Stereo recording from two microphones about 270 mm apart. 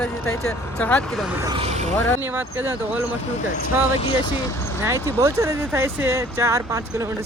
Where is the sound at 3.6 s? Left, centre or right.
Left.